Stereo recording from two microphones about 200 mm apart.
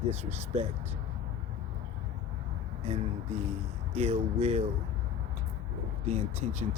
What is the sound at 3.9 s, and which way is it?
Speech, 30° right (ahead or behind).